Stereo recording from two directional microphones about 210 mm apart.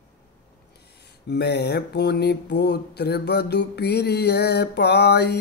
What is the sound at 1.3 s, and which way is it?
Mantra, 50° left (ahead or behind).